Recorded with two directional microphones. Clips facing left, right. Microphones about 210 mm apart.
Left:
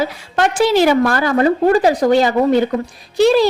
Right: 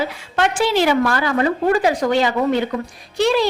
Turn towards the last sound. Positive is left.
turn(degrees=35)  # may be behind; listen again after turning